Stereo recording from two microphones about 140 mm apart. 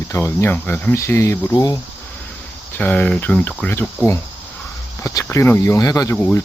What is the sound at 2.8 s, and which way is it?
Speech, 10° left (ahead or behind).